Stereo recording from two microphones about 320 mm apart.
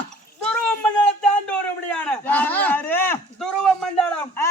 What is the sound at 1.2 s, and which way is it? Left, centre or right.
A man's voice, centre.